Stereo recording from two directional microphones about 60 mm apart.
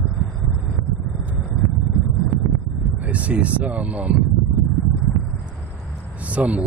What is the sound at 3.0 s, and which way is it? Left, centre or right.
Speech, right.